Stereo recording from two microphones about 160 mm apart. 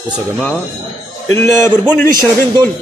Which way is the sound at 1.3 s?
10° left (ahead or behind).